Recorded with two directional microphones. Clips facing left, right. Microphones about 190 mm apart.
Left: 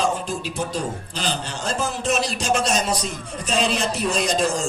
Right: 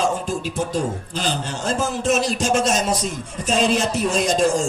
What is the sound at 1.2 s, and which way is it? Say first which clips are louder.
A man's voice: right 2 dB; 45° right (ahead or behind).